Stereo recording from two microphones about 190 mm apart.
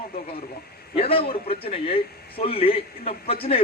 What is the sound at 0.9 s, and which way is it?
A man's voice, 30° left (ahead or behind).